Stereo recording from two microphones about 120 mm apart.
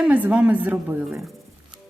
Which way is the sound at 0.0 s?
10° right (ahead or behind).